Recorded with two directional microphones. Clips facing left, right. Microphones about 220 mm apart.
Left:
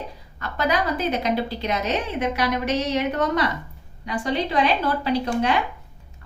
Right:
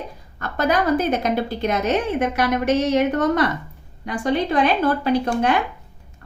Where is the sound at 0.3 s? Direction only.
50° right (ahead or behind).